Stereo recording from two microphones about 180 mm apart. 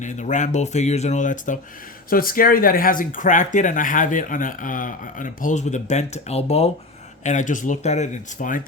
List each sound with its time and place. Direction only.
0.0 s speech: 45° left (ahead or behind)